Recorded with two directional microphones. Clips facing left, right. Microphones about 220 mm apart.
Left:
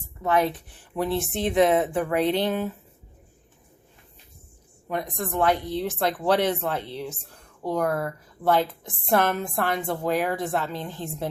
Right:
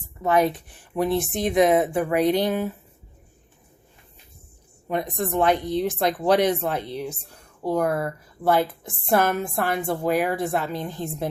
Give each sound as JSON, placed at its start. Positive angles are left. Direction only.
{"t": 0.2, "sound": "a woman's voice", "side_deg": -15}
{"t": 4.9, "sound": "a woman's voice", "side_deg": -25}